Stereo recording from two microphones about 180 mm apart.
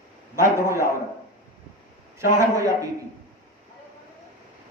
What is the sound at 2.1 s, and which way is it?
Speech, 15° right (ahead or behind).